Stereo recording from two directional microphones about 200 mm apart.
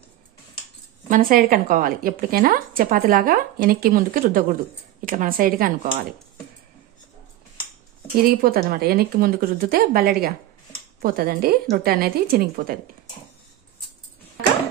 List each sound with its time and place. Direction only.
1.0 s a woman's voice: 40° right (ahead or behind)
8.2 s a woman's voice: 45° right (ahead or behind)